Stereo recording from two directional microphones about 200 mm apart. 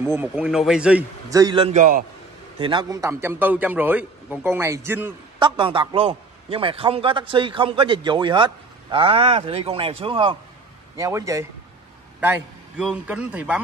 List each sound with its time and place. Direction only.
0.0 s a man's voice: 10° right (ahead or behind)
1.3 s a man's voice: 20° right (ahead or behind); by 2.0 s 40° right (ahead or behind)
2.6 s a man's voice: 20° right (ahead or behind)
5.4 s a man's voice: 25° right (ahead or behind)
11.0 s a man's voice: 15° right (ahead or behind)